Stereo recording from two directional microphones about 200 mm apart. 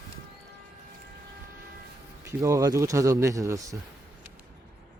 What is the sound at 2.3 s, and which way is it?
Speech, 15° right (ahead or behind).